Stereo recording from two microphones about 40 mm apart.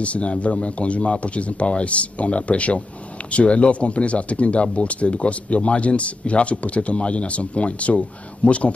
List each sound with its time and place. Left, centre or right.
0.0 s speech: left